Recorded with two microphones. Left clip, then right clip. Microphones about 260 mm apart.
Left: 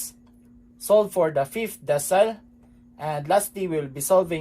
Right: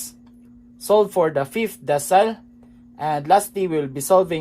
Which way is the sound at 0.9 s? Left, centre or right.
Right.